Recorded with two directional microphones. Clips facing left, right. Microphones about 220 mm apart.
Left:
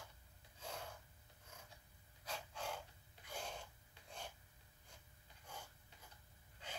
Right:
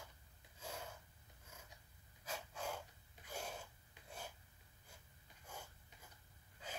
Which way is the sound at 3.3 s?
10° right (ahead or behind).